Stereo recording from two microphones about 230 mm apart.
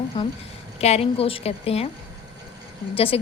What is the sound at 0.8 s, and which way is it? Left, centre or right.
A woman's voice, left.